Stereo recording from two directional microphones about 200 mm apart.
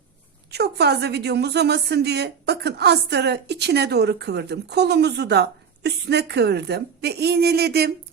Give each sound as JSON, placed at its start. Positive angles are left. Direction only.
{"t": 0.5, "sound": "a woman's voice", "side_deg": -55}